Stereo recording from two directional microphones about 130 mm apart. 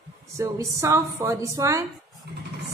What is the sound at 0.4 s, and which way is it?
A woman's voice, 25° right (ahead or behind).